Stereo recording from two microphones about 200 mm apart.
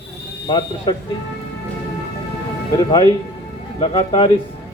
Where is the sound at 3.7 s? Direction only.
25° left (ahead or behind).